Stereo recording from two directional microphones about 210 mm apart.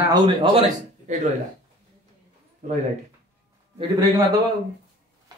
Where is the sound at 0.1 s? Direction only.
25° right (ahead or behind).